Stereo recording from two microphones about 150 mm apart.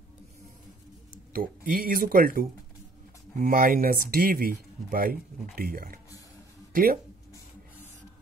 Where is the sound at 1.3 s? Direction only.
75° right (ahead or behind).